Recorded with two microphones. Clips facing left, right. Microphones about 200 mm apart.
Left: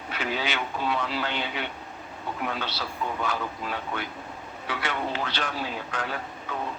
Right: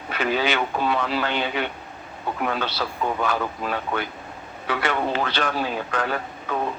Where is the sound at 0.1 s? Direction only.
65° right (ahead or behind).